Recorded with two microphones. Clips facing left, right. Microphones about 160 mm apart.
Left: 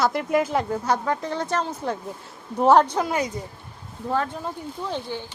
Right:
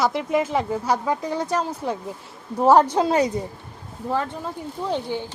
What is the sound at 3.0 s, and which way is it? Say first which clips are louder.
Speech: right 5 dB; 30° right (ahead or behind).